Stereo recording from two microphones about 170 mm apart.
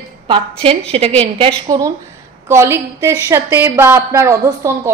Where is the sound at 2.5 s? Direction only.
15° right (ahead or behind).